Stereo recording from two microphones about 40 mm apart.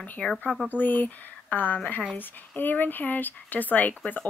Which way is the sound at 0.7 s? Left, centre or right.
Left.